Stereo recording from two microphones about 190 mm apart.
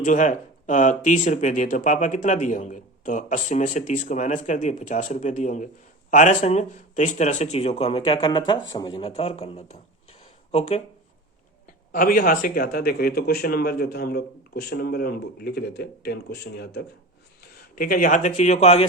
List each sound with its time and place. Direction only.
0.0 s speech: 40° left (ahead or behind)
11.9 s speech: 50° left (ahead or behind)
17.7 s speech: 45° left (ahead or behind)